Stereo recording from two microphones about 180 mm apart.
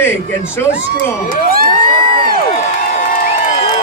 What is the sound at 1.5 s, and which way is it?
Crowd, 55° right (ahead or behind).